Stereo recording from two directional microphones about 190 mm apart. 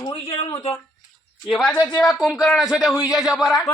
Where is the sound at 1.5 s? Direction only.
Centre (ahead or behind).